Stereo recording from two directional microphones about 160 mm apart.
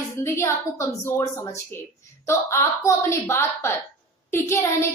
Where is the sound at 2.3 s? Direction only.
15° left (ahead or behind).